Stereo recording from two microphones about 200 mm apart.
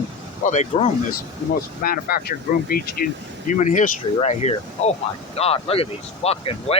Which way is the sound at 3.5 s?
40° left (ahead or behind).